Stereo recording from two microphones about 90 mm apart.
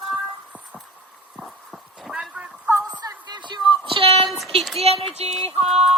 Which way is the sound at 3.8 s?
85° right.